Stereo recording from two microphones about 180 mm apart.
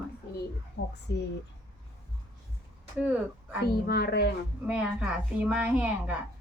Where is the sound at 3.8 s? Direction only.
60° left (ahead or behind).